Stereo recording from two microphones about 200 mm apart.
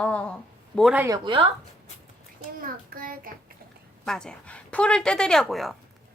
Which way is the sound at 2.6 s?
45° right (ahead or behind).